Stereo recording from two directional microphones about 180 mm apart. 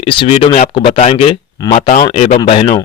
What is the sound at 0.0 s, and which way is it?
Speech, 30° left (ahead or behind).